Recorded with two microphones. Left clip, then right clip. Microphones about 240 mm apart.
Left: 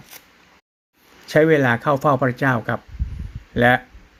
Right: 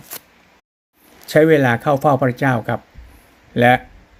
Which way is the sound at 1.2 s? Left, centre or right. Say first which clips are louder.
Right 3 dB; centre.